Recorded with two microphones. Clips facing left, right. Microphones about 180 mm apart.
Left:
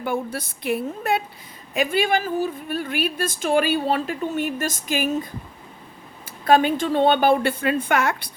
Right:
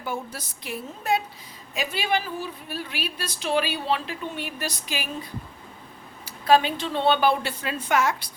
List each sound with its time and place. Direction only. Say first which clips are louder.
0.0 s a woman's voice: left 6 dB; 55° left (ahead or behind)
6.4 s a woman's voice: left 3 dB; 50° left (ahead or behind)